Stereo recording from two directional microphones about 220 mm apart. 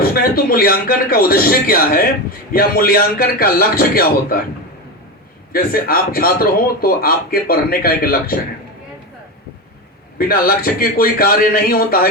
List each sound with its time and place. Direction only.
0.0 s a man's voice: 40° left (ahead or behind)
5.5 s speech: 40° left (ahead or behind)
10.2 s a man's voice: 40° left (ahead or behind)